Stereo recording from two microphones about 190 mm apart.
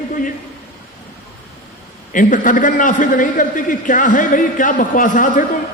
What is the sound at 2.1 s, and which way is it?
A man's voice, 45° left (ahead or behind).